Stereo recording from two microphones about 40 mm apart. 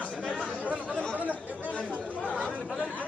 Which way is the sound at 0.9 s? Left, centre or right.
Left.